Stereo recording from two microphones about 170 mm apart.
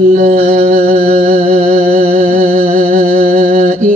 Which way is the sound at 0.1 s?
45° right (ahead or behind).